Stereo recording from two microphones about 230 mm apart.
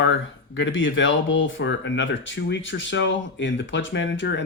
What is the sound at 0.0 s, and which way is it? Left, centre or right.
Speech, left.